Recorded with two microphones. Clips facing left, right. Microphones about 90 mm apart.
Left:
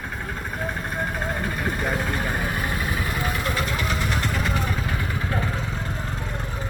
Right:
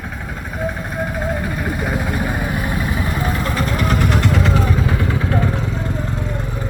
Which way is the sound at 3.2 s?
35° right (ahead or behind).